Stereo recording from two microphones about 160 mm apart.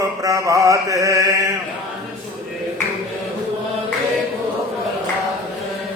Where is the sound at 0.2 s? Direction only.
20° right (ahead or behind).